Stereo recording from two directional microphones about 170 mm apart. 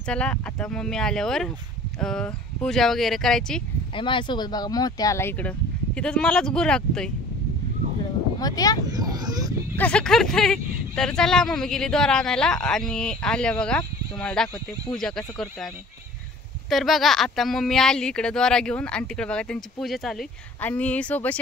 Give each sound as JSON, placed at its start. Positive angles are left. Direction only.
{"t": 0.0, "sound": "speech", "side_deg": 5}
{"t": 3.9, "sound": "speech", "side_deg": 30}
{"t": 8.4, "sound": "speech", "side_deg": 20}
{"t": 8.8, "sound": "speech", "side_deg": -25}
{"t": 9.8, "sound": "speech", "side_deg": 5}